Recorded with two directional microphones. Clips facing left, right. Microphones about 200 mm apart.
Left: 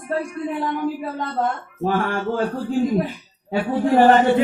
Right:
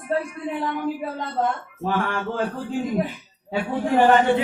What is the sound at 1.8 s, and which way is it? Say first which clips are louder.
Speech: left 3 dB; 45° left (ahead or behind).